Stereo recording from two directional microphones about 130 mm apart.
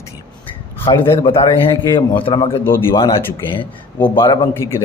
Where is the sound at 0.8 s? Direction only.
40° left (ahead or behind).